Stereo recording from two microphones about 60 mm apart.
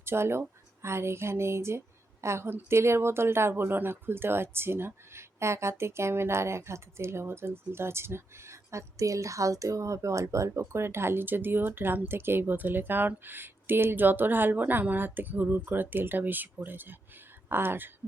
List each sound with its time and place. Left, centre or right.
0.0 s a woman's voice: right